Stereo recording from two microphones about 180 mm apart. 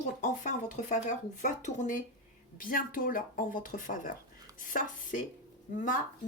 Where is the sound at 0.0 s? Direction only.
45° left (ahead or behind).